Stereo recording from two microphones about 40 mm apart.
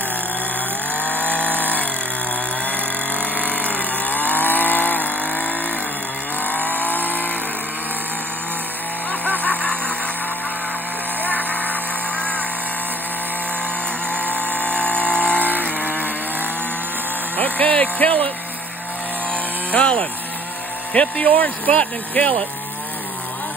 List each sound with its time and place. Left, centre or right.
1.0 s a sound: left
2.6 s chainsaw: left
6.4 s vehicle: left
9.2 s a sound: left
9.6 s a sound: left
11.2 s vehicle: left
14.2 s vehicle: left
15.6 s chainsaw: left
17.4 s vehicle: left
17.9 s music: left
19.3 s chainsaw: left
20.9 s speech: left